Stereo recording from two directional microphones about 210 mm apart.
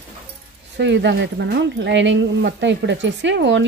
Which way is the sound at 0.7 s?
55° right (ahead or behind).